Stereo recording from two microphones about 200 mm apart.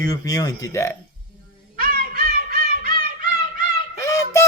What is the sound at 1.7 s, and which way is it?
Music, 45° right (ahead or behind).